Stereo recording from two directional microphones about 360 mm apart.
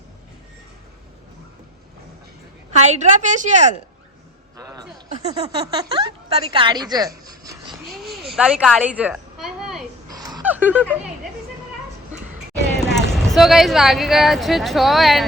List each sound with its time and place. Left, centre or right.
2.8 s a woman's voice: centre
4.5 s speech: centre
7.9 s a sound: centre
12.8 s speech: centre